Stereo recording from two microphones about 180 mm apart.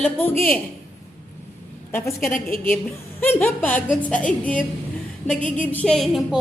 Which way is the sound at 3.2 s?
10° left (ahead or behind).